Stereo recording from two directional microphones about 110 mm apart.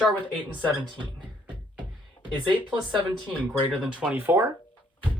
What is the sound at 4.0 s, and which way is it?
Speech, 15° right (ahead or behind).